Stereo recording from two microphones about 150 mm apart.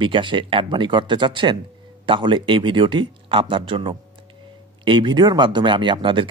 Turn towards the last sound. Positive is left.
turn(degrees=-35)  # may be behind; listen again after turning